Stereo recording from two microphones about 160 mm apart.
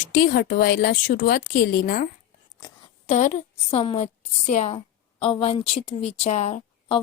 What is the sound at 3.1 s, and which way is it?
A woman's voice, 50° left (ahead or behind).